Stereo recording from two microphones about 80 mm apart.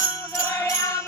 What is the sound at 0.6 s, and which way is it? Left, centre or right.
Music, left.